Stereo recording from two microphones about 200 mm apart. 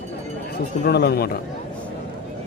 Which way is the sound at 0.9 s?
55° left (ahead or behind).